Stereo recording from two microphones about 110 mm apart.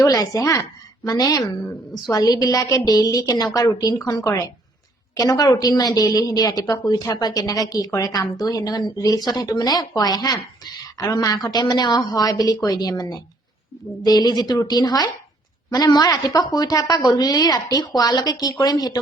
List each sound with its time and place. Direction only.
0.0 s a woman's voice: 35° left (ahead or behind)